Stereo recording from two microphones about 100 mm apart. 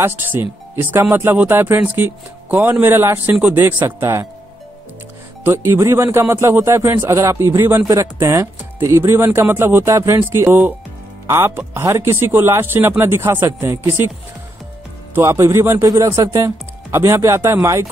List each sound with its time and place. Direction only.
0.0 s speech: 20° right (ahead or behind)
5.4 s speech: 25° right (ahead or behind)
15.1 s speech: 25° right (ahead or behind)